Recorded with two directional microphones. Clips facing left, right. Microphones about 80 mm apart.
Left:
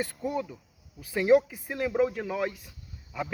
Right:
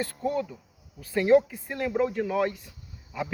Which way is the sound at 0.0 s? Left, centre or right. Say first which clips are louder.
Right 2 dB; centre.